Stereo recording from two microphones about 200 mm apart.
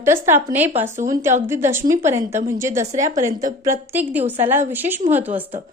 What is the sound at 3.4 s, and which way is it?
A woman's voice, 10° right (ahead or behind).